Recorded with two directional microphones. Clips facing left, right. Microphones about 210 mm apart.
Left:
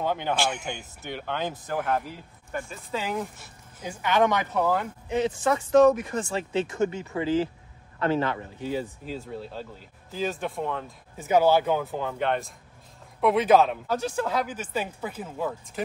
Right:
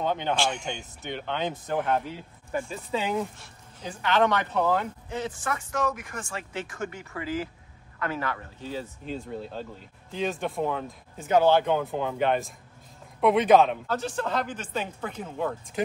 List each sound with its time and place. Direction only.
0.0 s speech: 5° left (ahead or behind)
5.1 s speech: 20° left (ahead or behind); by 15.8 s 5° left (ahead or behind)